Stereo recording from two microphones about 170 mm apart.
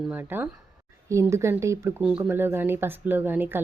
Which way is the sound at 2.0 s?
5° right (ahead or behind).